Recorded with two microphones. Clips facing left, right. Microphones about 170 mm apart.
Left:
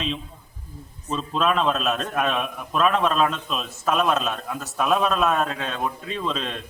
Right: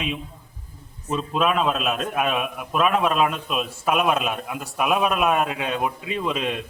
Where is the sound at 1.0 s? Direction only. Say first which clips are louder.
Right 1 dB; 10° right (ahead or behind).